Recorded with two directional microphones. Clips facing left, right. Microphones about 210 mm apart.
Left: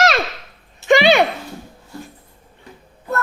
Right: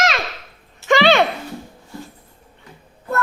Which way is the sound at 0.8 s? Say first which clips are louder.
Left 2 dB; 15° left (ahead or behind).